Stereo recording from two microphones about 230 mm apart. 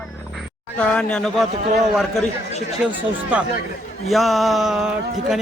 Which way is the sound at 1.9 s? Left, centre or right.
Centre.